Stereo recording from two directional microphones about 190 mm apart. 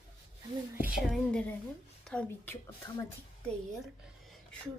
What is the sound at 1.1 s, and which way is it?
A woman's voice, 5° left (ahead or behind).